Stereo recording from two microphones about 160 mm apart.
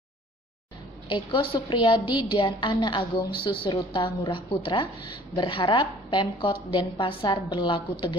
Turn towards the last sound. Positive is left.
turn(degrees=30)  # may be behind; listen again after turning